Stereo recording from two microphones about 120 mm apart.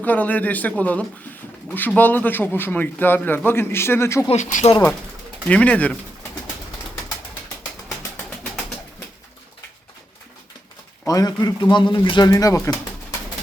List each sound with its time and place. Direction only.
0.0 s a man's voice: 15° left (ahead or behind)
4.3 s speech: 70° left (ahead or behind)
5.5 s a man's voice: 10° left (ahead or behind)
11.0 s a man's voice: 30° left (ahead or behind)
12.3 s speech: 30° left (ahead or behind)